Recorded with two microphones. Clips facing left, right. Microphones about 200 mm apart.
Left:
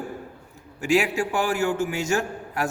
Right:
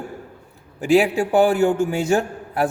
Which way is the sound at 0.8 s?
35° right (ahead or behind).